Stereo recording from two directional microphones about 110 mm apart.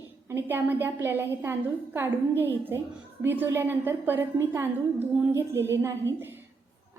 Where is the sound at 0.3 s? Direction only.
20° right (ahead or behind).